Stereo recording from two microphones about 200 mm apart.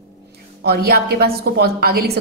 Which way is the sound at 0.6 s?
50° right (ahead or behind).